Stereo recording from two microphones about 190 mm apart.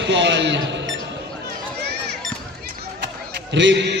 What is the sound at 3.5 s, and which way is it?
Speech, 70° right (ahead or behind).